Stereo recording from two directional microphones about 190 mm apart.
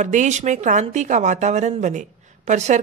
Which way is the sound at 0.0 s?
40° right (ahead or behind).